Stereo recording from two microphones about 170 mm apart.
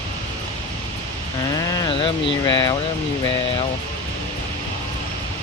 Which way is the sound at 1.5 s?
25° left (ahead or behind).